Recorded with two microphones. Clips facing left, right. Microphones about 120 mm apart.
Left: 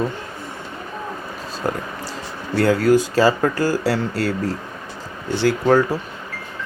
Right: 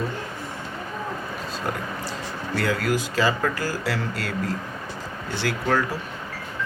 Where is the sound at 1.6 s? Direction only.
40° left (ahead or behind).